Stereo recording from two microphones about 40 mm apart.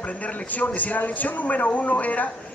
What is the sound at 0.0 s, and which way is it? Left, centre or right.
A man's voice, left.